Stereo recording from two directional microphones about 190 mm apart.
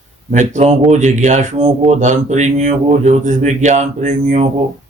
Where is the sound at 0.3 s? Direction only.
40° right (ahead or behind).